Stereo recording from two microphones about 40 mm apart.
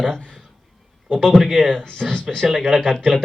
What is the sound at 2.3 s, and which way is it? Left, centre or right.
Speech, centre.